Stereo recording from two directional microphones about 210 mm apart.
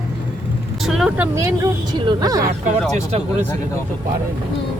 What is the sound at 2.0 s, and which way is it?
Speech, 20° right (ahead or behind).